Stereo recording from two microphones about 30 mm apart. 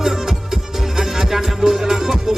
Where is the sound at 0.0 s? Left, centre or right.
Centre.